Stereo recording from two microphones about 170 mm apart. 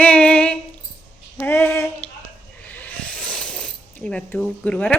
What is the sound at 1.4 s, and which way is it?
Female singing, 15° left (ahead or behind).